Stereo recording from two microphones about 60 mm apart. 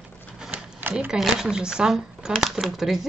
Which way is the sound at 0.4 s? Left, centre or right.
Centre.